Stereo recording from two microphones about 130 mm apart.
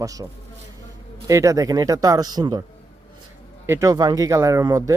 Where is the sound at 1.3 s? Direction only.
25° right (ahead or behind).